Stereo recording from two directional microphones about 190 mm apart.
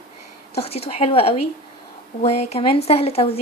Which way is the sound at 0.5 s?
30° left (ahead or behind).